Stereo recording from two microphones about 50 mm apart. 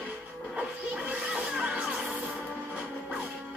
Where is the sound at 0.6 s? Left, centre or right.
Right.